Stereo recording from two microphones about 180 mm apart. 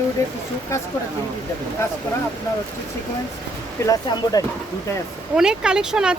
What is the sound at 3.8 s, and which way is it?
Speech, 20° left (ahead or behind).